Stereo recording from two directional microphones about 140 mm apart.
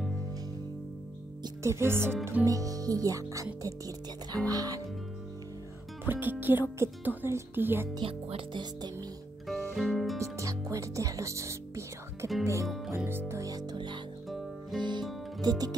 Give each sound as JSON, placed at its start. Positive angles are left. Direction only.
{"t": 1.6, "sound": "speech", "side_deg": -20}
{"t": 6.0, "sound": "speech", "side_deg": -15}
{"t": 8.0, "sound": "speech", "side_deg": -35}
{"t": 9.5, "sound": "music", "side_deg": 0}
{"t": 10.1, "sound": "speech", "side_deg": -20}
{"t": 12.6, "sound": "speech", "side_deg": 0}
{"t": 12.9, "sound": "speech", "side_deg": -15}